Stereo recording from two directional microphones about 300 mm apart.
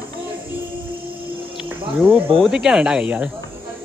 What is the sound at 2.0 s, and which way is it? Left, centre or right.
Speech, centre.